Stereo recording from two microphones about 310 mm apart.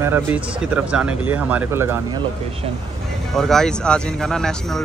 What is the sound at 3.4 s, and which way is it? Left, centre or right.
Speech, centre.